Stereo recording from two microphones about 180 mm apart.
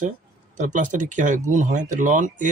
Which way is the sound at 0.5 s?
45° right (ahead or behind).